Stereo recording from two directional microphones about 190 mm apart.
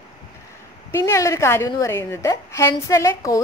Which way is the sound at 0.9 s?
15° left (ahead or behind).